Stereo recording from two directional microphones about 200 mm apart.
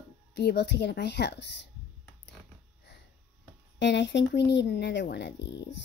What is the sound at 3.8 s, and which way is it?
Speech, 60° left (ahead or behind).